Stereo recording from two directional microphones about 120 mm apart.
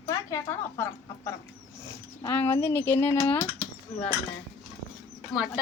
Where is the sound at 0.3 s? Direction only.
25° left (ahead or behind).